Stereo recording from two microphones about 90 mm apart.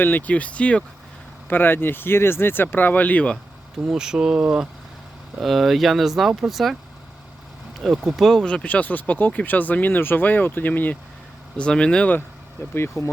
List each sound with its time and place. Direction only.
0.0 s speech: 20° left (ahead or behind)
3.8 s speech: 5° right (ahead or behind)
7.8 s speech: centre (ahead or behind)
12.7 s speech: 30° left (ahead or behind)